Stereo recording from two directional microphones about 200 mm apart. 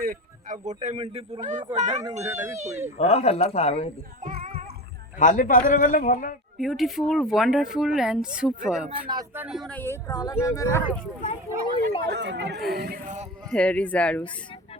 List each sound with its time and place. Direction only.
0.0 s speech: 45° right (ahead or behind)
2.2 s speech: 15° right (ahead or behind)
2.6 s speech: 35° right (ahead or behind)
3.0 s a man's voice: 30° left (ahead or behind)
4.2 s music: 40° right (ahead or behind)
5.2 s a man's voice: 40° left (ahead or behind)
6.6 s speech: centre (ahead or behind)
12.0 s speech: 55° right (ahead or behind)
13.5 s speech: 5° left (ahead or behind)